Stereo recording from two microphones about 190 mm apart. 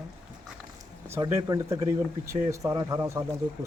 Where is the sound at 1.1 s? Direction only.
15° right (ahead or behind).